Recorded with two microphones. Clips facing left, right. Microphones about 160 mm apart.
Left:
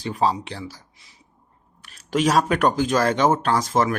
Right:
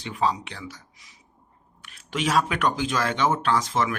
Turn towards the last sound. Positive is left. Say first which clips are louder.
# left 3 dB
turn(degrees=40)  # may be behind; listen again after turning